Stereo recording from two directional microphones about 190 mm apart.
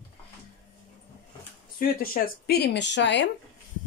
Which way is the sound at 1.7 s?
50° left (ahead or behind).